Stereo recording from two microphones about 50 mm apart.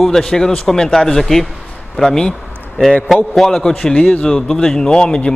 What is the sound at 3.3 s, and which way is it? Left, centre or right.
A man's voice, centre.